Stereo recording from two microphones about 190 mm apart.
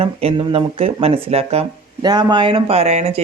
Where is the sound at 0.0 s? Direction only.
30° right (ahead or behind).